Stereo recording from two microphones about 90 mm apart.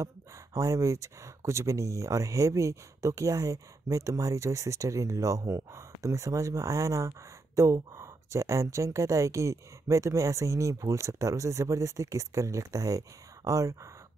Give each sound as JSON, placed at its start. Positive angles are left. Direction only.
{"t": 0.6, "sound": "speech", "side_deg": -35}